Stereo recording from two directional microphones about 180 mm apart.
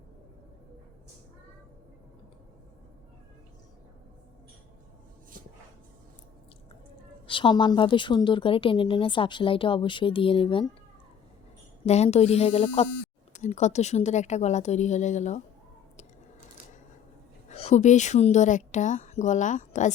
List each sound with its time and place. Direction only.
7.3 s a woman's voice: 25° left (ahead or behind)
11.9 s a woman's voice: 35° left (ahead or behind)
17.5 s a woman's voice: 35° left (ahead or behind)